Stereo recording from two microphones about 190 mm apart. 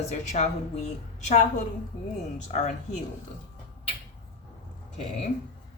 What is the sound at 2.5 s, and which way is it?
Speech, 35° left (ahead or behind).